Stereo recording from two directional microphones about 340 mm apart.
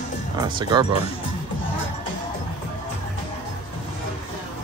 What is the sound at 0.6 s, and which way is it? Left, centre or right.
Speech, centre.